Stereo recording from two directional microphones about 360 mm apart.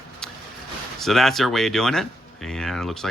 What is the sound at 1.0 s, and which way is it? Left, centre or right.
Speech, centre.